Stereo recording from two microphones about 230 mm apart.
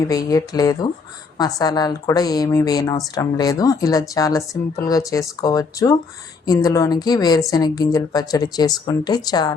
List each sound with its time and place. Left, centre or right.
0.0 s speech: centre